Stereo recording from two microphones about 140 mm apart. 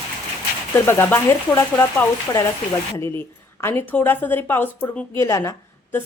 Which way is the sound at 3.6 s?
20° left (ahead or behind).